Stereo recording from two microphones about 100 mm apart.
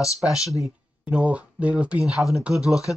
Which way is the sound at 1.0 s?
15° right (ahead or behind).